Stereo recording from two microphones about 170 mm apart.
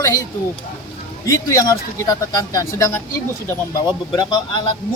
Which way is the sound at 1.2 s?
20° left (ahead or behind).